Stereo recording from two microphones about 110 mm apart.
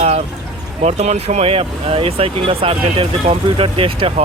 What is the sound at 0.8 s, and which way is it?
Speech, 90° right.